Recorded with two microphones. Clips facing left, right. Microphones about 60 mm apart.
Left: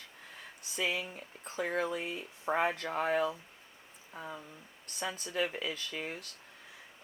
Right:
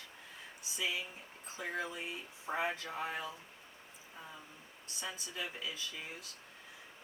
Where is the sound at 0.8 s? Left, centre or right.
Left.